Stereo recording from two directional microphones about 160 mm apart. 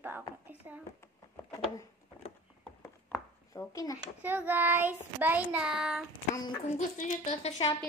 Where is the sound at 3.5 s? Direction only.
20° left (ahead or behind).